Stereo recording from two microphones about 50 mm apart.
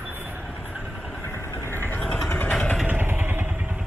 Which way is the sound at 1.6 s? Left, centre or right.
Left.